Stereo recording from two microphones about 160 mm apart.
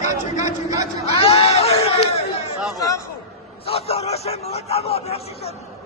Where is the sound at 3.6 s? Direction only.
40° left (ahead or behind).